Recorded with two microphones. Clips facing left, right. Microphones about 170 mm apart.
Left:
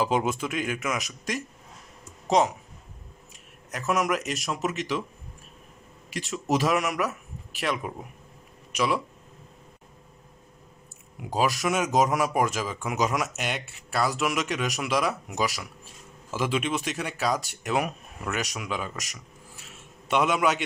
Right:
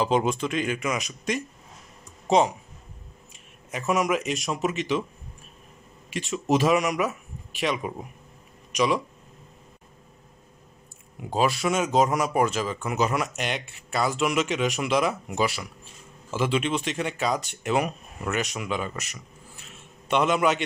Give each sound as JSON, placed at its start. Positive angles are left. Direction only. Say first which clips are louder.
{"t": 0.0, "sound": "speech", "louder": "right 2 dB", "side_deg": 5}
{"t": 3.7, "sound": "speech", "louder": "right 2 dB", "side_deg": 0}
{"t": 6.1, "sound": "speech", "louder": "right 3 dB", "side_deg": 0}
{"t": 11.2, "sound": "speech", "louder": "right 1 dB", "side_deg": 5}
{"t": 19.6, "sound": "a sound", "louder": "even", "side_deg": 5}